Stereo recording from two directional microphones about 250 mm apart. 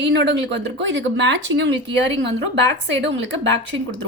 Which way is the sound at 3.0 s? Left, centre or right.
Right.